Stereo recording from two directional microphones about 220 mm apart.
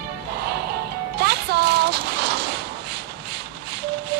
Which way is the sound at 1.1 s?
50° right (ahead or behind).